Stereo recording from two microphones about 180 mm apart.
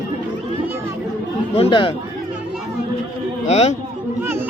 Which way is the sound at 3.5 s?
40° left (ahead or behind).